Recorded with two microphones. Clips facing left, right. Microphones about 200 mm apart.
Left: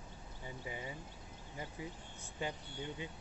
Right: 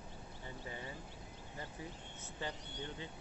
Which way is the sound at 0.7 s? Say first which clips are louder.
Left 3 dB; 15° left (ahead or behind).